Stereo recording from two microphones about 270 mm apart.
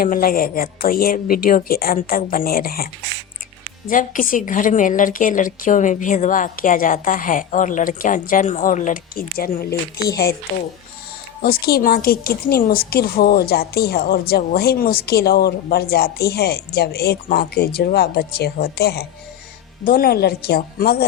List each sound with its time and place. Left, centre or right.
0.0 s a woman's voice: left
11.4 s a woman's voice: left